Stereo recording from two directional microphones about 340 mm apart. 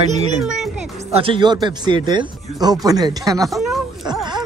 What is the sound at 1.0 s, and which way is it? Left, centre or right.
Speech, centre.